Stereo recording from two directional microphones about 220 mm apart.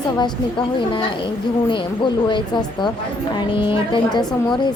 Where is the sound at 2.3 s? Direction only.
20° left (ahead or behind).